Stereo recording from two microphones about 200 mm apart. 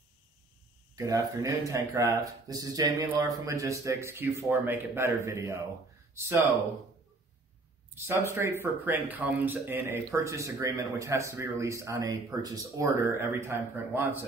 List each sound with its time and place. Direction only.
0.9 s speech: 15° right (ahead or behind)
7.9 s speech: 10° right (ahead or behind)